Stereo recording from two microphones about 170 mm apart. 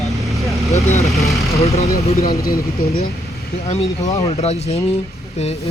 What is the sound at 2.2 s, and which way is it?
Speech, 65° left (ahead or behind).